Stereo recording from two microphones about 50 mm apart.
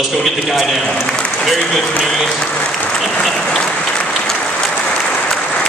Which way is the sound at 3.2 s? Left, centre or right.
Centre.